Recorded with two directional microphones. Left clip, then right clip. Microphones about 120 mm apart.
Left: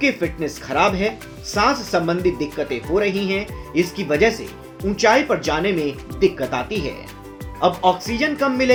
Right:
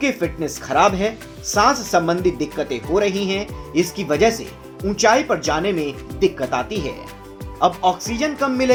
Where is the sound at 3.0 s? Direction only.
10° left (ahead or behind).